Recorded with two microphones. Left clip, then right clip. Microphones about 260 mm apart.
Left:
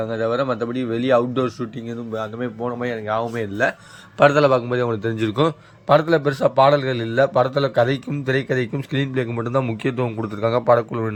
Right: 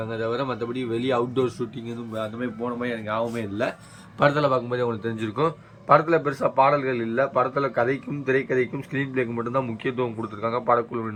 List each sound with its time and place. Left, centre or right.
0.1 s a man's voice: centre; by 10.2 s left